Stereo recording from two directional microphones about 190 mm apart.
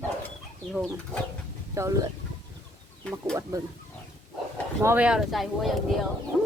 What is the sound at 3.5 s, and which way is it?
Speech, 15° right (ahead or behind).